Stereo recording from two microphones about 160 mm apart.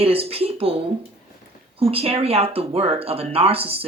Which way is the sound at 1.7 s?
35° right (ahead or behind).